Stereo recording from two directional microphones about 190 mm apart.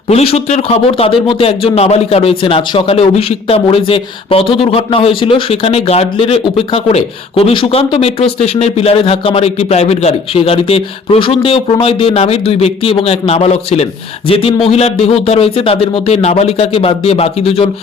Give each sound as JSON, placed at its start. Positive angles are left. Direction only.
{"t": 0.1, "sound": "speech", "side_deg": 35}